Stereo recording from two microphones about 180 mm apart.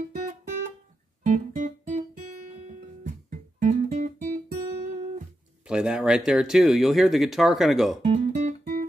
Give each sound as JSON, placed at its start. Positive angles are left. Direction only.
{"t": 0.1, "sound": "music", "side_deg": -45}
{"t": 1.2, "sound": "guitar", "side_deg": -45}
{"t": 5.7, "sound": "speech", "side_deg": -5}
{"t": 8.0, "sound": "guitar", "side_deg": -40}